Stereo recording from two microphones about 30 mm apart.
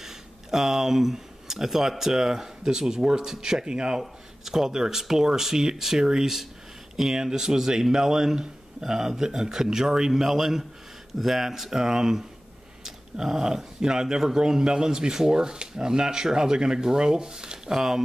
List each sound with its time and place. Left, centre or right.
0.0 s speech: centre; by 4.0 s right
4.5 s speech: centre
7.2 s speech: right